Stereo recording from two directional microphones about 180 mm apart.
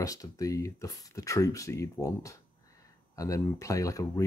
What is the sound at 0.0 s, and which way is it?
Speech, 20° left (ahead or behind).